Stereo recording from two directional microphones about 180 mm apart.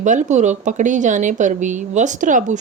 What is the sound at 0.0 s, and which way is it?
Speech, 45° right (ahead or behind).